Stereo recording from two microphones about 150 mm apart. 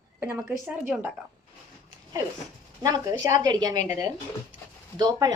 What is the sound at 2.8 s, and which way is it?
Speech, 30° right (ahead or behind).